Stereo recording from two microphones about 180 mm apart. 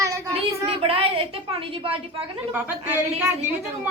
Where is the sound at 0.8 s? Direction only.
30° right (ahead or behind).